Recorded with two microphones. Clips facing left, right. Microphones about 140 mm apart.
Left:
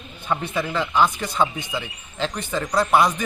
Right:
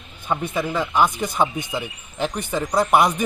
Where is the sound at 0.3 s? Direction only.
15° right (ahead or behind).